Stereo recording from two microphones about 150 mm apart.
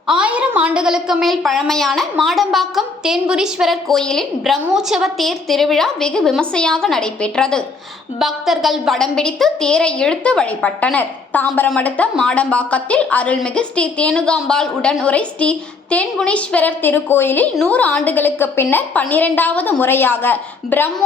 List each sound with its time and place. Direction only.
0.1 s a woman's voice: 10° right (ahead or behind); by 20.9 s 15° left (ahead or behind)